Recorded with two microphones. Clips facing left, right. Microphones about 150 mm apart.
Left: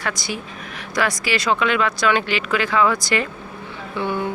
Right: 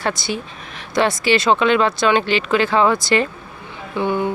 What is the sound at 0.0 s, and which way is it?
Speech, 25° right (ahead or behind).